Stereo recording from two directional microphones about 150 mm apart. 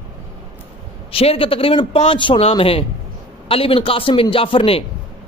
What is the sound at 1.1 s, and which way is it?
A man's voice, 40° left (ahead or behind).